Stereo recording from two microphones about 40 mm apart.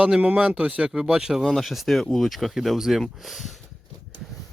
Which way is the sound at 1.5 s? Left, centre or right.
Centre.